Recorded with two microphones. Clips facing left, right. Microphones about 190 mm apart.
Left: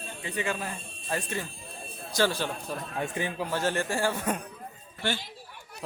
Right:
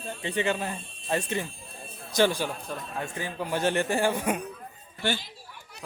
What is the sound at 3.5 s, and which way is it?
Speech, 20° right (ahead or behind).